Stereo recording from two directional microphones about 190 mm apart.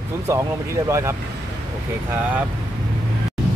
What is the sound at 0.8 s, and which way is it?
Speech, 15° right (ahead or behind).